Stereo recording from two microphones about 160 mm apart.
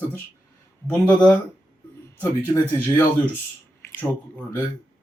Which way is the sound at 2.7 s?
10° left (ahead or behind).